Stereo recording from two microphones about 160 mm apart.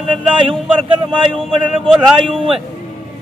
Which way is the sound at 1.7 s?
5° right (ahead or behind).